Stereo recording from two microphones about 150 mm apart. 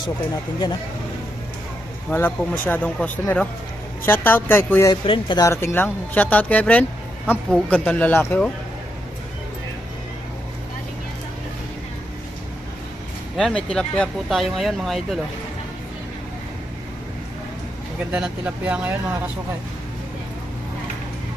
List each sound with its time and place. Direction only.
2.0 s speech: 10° left (ahead or behind)
4.9 s speech: 35° left (ahead or behind)
5.5 s speech: 15° left (ahead or behind)
13.3 s speech: 5° left (ahead or behind)
18.1 s speech: 10° right (ahead or behind)